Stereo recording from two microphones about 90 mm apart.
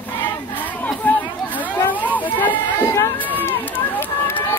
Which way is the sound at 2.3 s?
20° left (ahead or behind).